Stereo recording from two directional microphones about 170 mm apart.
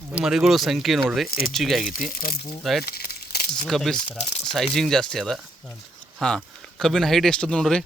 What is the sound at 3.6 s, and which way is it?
Speech, centre (ahead or behind).